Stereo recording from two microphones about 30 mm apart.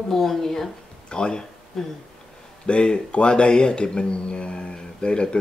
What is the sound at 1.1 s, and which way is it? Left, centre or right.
Speech, left.